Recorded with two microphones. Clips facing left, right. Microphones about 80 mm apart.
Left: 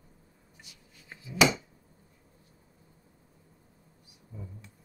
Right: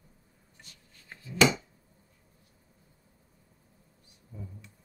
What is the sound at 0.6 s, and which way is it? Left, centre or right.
Chopping, centre.